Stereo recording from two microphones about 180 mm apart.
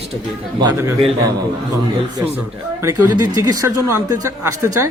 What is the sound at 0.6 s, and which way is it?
Speech, 15° right (ahead or behind).